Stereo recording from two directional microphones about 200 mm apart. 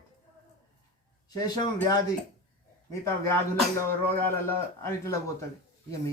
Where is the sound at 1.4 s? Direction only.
20° left (ahead or behind).